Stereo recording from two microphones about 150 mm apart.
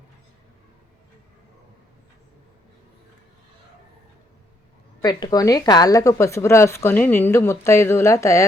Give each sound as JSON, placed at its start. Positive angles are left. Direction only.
{"t": 5.0, "sound": "a woman's voice", "side_deg": 25}